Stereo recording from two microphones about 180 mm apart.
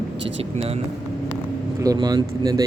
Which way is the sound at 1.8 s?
20° right (ahead or behind).